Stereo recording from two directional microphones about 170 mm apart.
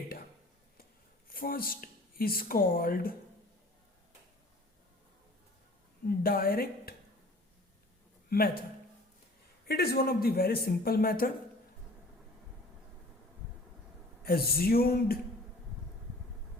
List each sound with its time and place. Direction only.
1.3 s speech: 60° left (ahead or behind)
6.1 s a man's voice: 60° left (ahead or behind)
8.3 s a man's voice: 60° left (ahead or behind)
9.6 s a man's voice: 65° left (ahead or behind)
14.2 s a man's voice: 65° left (ahead or behind)